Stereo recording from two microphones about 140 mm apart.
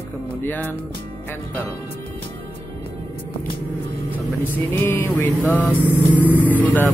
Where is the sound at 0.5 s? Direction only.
10° left (ahead or behind).